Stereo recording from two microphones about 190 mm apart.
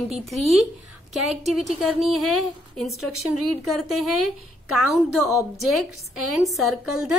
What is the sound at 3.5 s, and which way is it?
A woman's voice, centre (ahead or behind).